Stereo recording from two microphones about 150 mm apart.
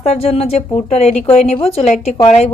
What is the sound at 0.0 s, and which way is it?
A woman's voice, 45° left (ahead or behind).